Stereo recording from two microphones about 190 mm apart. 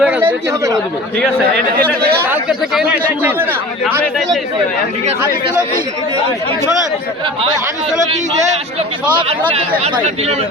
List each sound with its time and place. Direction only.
0.0 s speech: 10° right (ahead or behind)
2.2 s speech: 5° right (ahead or behind)
9.1 s speech: 25° right (ahead or behind)